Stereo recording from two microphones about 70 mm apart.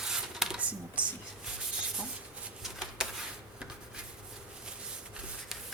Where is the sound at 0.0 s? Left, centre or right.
Centre.